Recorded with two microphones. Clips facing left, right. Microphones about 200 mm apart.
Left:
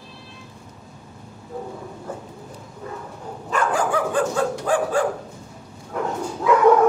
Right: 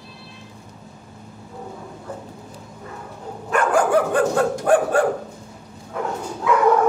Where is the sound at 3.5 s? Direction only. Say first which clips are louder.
Right 4 dB; 60° right (ahead or behind).